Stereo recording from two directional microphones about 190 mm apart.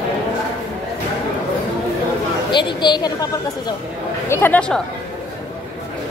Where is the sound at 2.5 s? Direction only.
25° left (ahead or behind).